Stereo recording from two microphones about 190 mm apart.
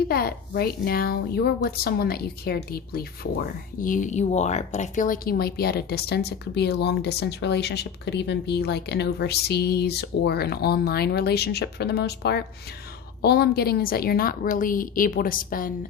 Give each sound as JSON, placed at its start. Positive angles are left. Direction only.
{"t": 0.1, "sound": "a woman's voice", "side_deg": 55}